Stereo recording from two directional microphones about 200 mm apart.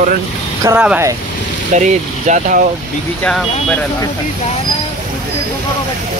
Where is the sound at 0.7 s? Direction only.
5° right (ahead or behind).